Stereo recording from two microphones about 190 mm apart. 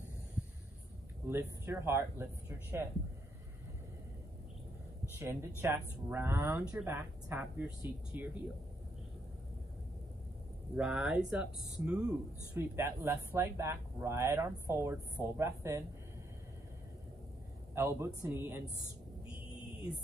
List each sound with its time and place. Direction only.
1.2 s speech: 15° right (ahead or behind)
5.2 s speech: 15° right (ahead or behind)
10.8 s speech: 5° right (ahead or behind)
12.1 s speech: 15° right (ahead or behind)
17.7 s speech: 15° right (ahead or behind)